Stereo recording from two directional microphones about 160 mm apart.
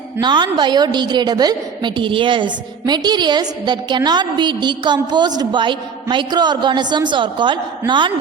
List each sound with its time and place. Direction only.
0.2 s a woman's voice: 30° right (ahead or behind)